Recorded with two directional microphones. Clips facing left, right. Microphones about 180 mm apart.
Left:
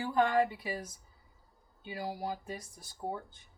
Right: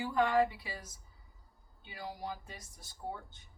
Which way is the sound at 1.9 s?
30° left (ahead or behind).